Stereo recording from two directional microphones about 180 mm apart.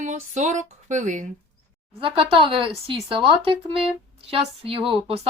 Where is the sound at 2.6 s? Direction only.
30° right (ahead or behind).